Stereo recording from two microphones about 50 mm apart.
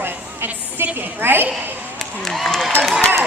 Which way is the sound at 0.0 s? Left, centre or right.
Right.